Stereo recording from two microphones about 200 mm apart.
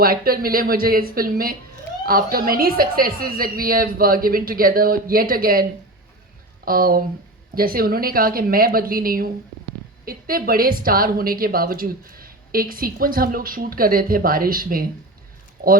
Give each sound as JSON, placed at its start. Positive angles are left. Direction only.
{"t": 0.0, "sound": "a woman's voice", "side_deg": -50}
{"t": 6.7, "sound": "a woman's voice", "side_deg": -45}